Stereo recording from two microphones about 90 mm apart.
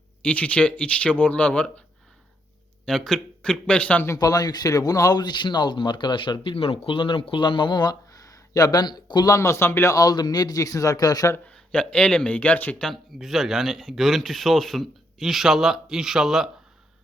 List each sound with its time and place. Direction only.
0.2 s speech: 15° left (ahead or behind)
2.8 s speech: 5° left (ahead or behind)
4.2 s speech: 45° left (ahead or behind)
8.1 s a sound: 40° left (ahead or behind)
9.3 s speech: 35° left (ahead or behind)
9.9 s a man's voice: 45° left (ahead or behind)
11.4 s speech: 10° left (ahead or behind)
12.9 s speech: centre (ahead or behind)